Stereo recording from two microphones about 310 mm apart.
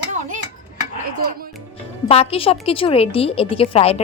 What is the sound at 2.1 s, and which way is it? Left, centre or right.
A woman's voice, centre.